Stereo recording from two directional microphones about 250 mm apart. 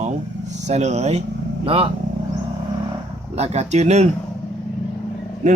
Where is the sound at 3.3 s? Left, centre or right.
Right.